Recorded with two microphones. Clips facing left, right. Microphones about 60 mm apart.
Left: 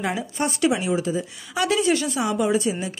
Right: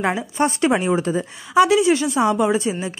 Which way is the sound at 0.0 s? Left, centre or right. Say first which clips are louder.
Right 5 dB; right.